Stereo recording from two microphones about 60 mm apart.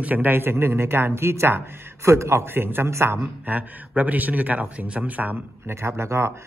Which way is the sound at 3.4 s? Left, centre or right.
Right.